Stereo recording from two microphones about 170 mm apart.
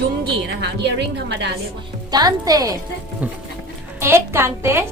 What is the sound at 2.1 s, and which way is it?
Speech, 20° right (ahead or behind).